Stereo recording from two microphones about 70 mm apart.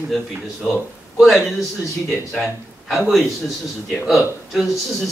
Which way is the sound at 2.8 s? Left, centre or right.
Centre.